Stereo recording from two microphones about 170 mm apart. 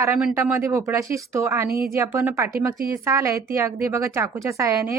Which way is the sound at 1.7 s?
60° right (ahead or behind).